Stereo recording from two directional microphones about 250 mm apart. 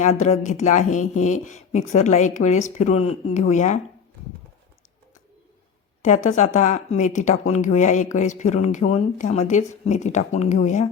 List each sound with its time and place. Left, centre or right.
0.0 s speech: left
6.1 s speech: left